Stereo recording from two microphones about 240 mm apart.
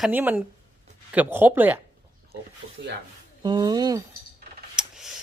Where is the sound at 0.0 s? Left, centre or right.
Centre.